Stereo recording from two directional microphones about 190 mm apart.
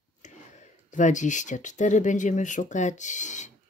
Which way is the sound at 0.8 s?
40° left (ahead or behind).